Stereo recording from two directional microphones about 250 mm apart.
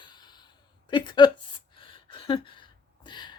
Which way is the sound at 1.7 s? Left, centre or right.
Centre.